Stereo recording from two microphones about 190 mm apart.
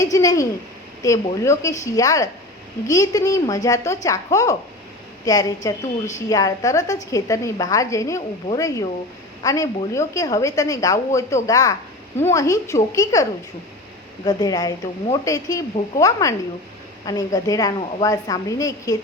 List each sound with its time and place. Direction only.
0.0 s a woman's voice: 15° left (ahead or behind)
14.3 s a woman's voice: 20° left (ahead or behind)